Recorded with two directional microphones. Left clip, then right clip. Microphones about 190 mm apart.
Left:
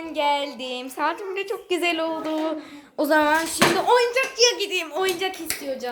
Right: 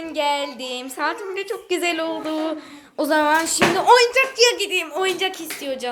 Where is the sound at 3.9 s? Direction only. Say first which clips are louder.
Right 5 dB; 10° right (ahead or behind).